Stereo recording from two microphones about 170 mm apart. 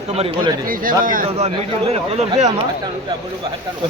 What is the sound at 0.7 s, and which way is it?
Speech, 55° right (ahead or behind).